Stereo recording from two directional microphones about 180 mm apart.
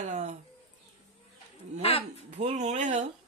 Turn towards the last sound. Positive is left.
turn(degrees=-40)  # may be behind; listen again after turning